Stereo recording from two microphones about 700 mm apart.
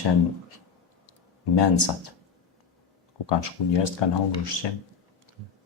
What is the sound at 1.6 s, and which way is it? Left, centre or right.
Speech, left.